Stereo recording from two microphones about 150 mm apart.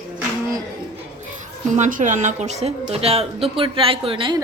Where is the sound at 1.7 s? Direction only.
55° right (ahead or behind); by 4.4 s 35° right (ahead or behind).